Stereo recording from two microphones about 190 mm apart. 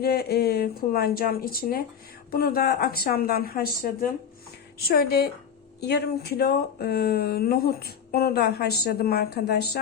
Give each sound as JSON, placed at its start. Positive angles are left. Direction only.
{"t": 0.0, "sound": "speech", "side_deg": 55}